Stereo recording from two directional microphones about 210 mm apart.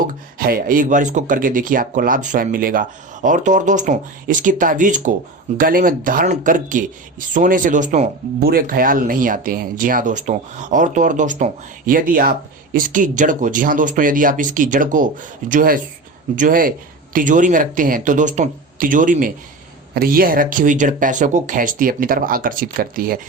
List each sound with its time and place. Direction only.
0.1 s speech: 45° right (ahead or behind)